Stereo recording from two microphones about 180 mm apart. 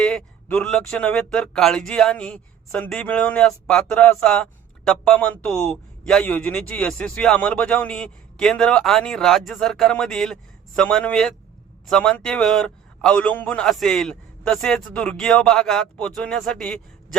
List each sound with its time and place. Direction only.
0.0 s a man's voice: 5° left (ahead or behind)